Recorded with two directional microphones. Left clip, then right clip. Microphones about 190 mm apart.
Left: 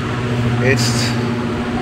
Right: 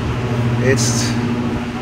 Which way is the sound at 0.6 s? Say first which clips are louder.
Left 1 dB; 25° right (ahead or behind).